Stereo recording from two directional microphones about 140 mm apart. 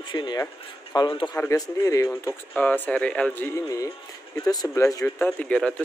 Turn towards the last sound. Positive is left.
turn(degrees=10)  # may be behind; listen again after turning